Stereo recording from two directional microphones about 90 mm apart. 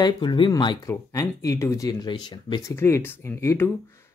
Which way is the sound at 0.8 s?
35° left (ahead or behind).